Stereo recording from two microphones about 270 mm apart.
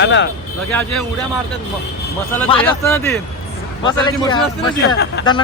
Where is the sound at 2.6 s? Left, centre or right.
Centre.